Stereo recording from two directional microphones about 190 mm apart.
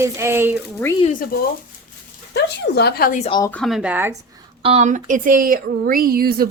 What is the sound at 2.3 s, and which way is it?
Speech, 65° left (ahead or behind).